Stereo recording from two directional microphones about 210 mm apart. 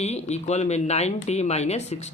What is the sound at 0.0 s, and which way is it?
Speech, 30° left (ahead or behind).